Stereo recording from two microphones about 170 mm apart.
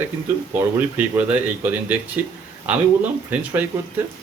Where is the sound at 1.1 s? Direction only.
10° right (ahead or behind).